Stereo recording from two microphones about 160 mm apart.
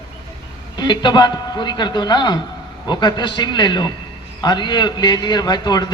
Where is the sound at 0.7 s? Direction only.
30° left (ahead or behind).